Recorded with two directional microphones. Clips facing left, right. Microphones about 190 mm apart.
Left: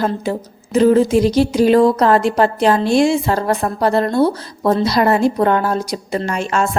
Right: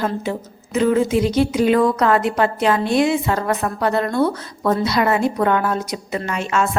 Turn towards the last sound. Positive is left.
turn(degrees=35)  # may be behind; listen again after turning